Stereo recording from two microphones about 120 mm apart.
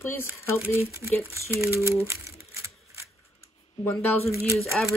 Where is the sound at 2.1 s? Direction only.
25° right (ahead or behind).